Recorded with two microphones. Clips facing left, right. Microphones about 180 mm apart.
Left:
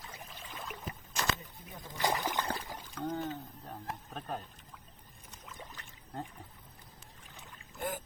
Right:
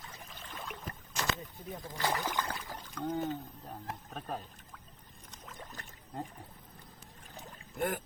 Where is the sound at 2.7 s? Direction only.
10° left (ahead or behind).